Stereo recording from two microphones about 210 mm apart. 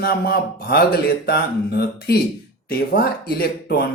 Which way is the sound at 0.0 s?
50° left (ahead or behind).